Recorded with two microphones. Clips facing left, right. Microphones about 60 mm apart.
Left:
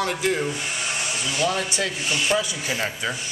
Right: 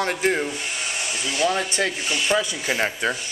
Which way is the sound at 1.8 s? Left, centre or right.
Right.